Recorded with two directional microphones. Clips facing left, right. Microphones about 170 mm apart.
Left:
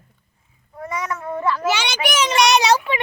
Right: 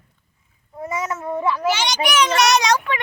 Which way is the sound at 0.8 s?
25° right (ahead or behind).